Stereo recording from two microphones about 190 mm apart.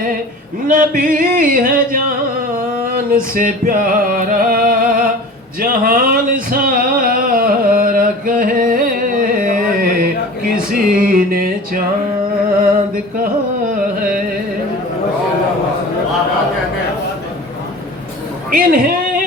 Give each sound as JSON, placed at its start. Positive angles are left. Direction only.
{"t": 0.7, "sound": "music", "side_deg": -45}
{"t": 2.8, "sound": "a sound", "side_deg": -45}
{"t": 18.5, "sound": "a man's voice", "side_deg": -45}